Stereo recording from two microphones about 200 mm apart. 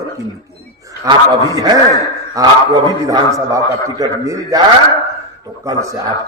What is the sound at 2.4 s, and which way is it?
A man's voice, 15° right (ahead or behind).